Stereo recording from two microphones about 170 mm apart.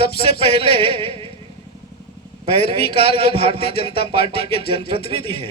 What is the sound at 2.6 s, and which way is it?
A man's voice, 65° left (ahead or behind).